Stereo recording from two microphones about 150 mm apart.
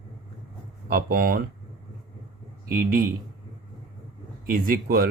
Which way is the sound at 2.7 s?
70° right (ahead or behind).